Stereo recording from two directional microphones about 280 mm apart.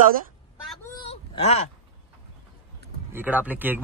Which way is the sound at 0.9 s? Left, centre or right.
Left.